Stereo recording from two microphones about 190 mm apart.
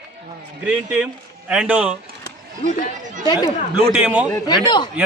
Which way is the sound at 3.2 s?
20° left (ahead or behind).